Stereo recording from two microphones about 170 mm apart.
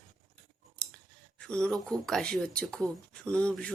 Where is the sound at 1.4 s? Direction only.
5° left (ahead or behind).